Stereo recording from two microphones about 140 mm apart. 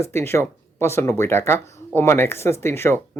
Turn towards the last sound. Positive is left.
turn(degrees=20)  # may be behind; listen again after turning